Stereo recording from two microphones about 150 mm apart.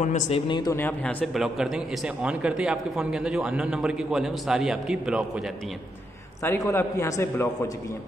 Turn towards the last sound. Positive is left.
turn(degrees=20)  # may be behind; listen again after turning